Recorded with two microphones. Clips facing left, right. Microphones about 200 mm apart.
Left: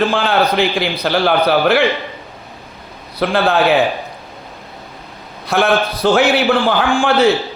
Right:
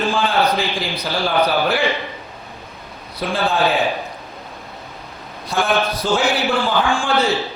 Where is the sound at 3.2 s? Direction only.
70° left (ahead or behind).